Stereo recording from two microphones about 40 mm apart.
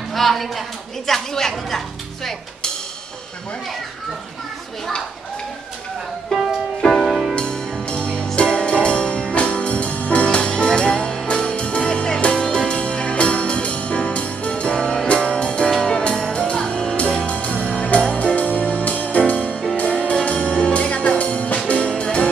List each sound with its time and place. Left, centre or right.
0.1 s a woman's voice: centre
6.3 s music: centre
7.3 s music: left
15.7 s music: centre
16.0 s music: left